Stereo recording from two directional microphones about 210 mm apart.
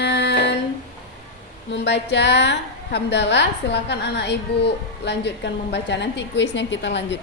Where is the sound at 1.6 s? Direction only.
55° left (ahead or behind).